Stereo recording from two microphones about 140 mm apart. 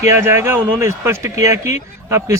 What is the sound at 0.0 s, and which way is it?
Speech, 20° right (ahead or behind).